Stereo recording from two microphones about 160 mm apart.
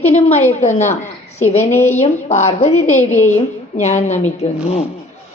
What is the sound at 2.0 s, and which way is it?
A woman's voice, 45° left (ahead or behind).